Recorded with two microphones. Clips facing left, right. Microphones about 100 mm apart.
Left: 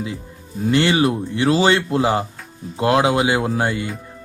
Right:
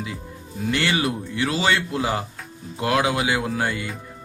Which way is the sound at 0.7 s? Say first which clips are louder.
Left 6 dB; 25° left (ahead or behind).